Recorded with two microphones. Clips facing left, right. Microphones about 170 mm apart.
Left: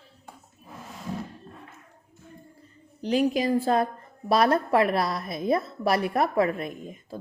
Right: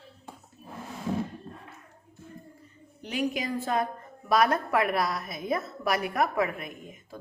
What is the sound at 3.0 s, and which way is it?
A woman's voice, 35° left (ahead or behind).